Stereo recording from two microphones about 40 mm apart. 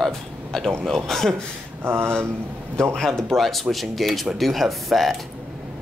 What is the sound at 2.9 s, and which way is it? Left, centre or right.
Speech, centre.